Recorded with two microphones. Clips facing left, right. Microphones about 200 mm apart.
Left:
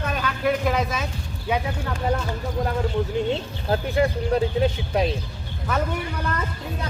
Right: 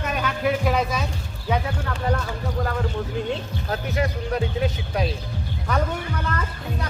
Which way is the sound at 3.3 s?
30° left (ahead or behind).